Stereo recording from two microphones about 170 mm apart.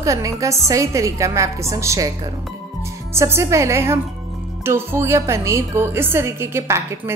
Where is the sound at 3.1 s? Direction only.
15° right (ahead or behind).